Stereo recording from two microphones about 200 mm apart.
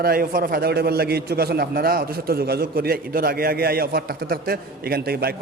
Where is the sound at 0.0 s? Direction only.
45° right (ahead or behind).